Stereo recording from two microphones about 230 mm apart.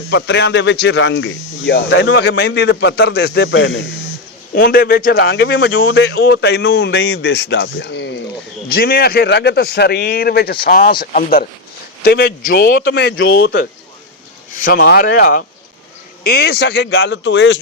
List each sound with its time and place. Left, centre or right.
0.1 s cricket: left
4.5 s cricket: left
14.5 s speech: left
16.2 s cricket: left